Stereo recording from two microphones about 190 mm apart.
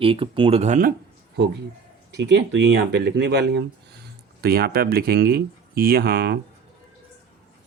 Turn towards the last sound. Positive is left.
turn(degrees=-60)  # may be behind; listen again after turning